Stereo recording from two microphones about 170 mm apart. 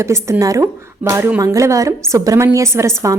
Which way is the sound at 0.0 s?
15° right (ahead or behind).